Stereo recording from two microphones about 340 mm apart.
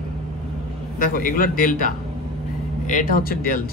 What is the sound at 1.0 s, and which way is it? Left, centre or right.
Speech, left.